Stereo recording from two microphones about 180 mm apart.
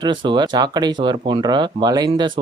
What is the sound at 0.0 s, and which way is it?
Speech, 25° right (ahead or behind).